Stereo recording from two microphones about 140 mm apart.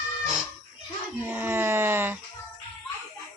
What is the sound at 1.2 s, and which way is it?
Speech, 15° right (ahead or behind).